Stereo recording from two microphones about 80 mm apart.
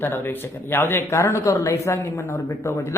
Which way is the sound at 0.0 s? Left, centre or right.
Left.